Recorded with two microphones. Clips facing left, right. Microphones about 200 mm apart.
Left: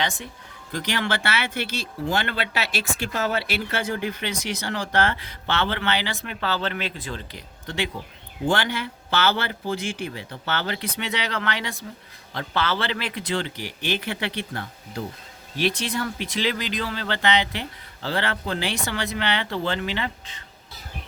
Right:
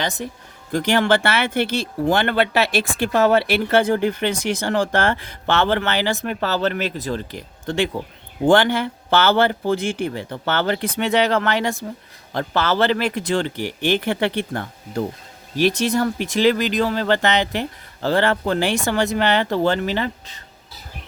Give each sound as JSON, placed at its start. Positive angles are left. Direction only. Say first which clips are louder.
{"t": 0.7, "sound": "speech", "louder": "right 9 dB", "side_deg": -50}